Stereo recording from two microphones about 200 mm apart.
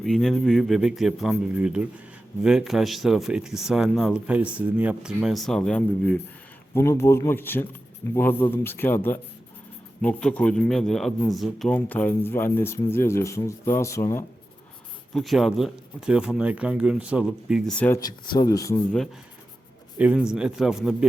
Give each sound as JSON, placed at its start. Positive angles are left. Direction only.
{"t": 0.0, "sound": "a man's voice", "side_deg": 0}
{"t": 15.1, "sound": "speech", "side_deg": 0}
{"t": 17.7, "sound": "a man's voice", "side_deg": 10}
{"t": 20.0, "sound": "speech", "side_deg": -5}